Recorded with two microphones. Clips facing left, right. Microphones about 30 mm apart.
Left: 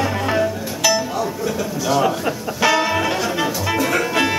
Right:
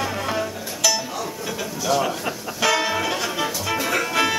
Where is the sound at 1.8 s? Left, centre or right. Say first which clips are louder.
Left 4 dB; centre.